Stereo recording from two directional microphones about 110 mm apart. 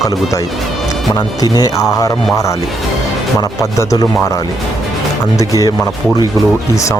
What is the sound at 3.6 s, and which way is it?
Speech, 30° left (ahead or behind).